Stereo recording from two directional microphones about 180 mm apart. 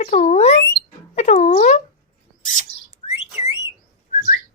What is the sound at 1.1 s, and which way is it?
Cat, 35° left (ahead or behind).